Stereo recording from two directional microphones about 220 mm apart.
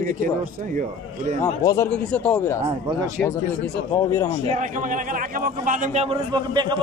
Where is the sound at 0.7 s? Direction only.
35° right (ahead or behind).